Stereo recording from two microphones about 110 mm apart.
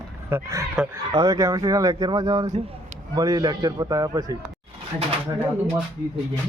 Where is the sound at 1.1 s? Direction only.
40° right (ahead or behind).